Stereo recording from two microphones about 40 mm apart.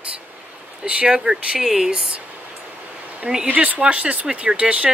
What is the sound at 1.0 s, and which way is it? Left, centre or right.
A woman's voice, centre.